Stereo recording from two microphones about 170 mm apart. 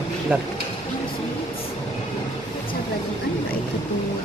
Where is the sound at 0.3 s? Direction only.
10° right (ahead or behind).